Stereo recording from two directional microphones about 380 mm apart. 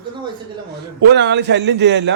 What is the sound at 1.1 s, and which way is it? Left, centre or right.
Speech, right.